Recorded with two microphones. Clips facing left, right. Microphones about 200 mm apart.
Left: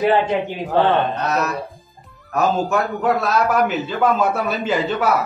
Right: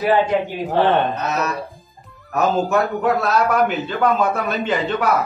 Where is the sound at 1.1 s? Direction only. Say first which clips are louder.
Left 1 dB; centre (ahead or behind).